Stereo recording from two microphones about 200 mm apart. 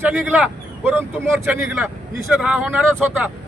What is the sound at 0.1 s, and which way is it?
Speech, 5° right (ahead or behind).